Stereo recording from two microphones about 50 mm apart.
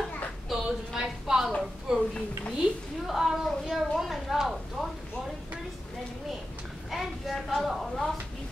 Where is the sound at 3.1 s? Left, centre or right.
Centre.